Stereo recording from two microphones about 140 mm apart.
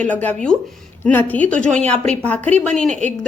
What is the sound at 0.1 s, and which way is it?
A woman's voice, 10° left (ahead or behind).